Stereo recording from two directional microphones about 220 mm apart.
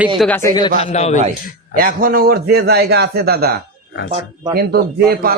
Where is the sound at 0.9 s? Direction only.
30° left (ahead or behind).